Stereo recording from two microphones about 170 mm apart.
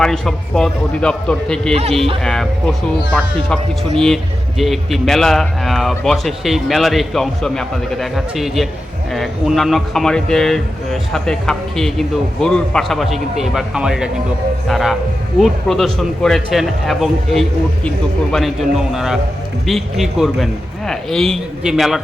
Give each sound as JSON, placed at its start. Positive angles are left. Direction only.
{"t": 0.0, "sound": "a man's voice", "side_deg": 5}
{"t": 1.7, "sound": "speech", "side_deg": -35}
{"t": 2.2, "sound": "a man's voice", "side_deg": 5}